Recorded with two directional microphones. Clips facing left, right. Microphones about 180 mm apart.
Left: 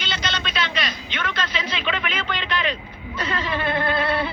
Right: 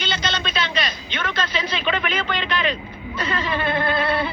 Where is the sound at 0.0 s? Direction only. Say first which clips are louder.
Right 3 dB; 35° right (ahead or behind).